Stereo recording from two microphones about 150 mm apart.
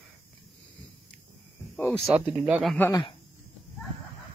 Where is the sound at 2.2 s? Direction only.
5° right (ahead or behind).